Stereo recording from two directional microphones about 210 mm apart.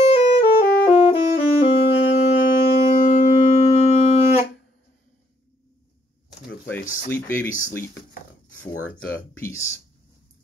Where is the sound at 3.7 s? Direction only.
30° left (ahead or behind).